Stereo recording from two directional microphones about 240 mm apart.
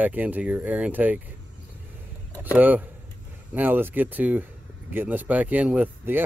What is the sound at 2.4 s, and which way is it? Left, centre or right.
Speech, centre.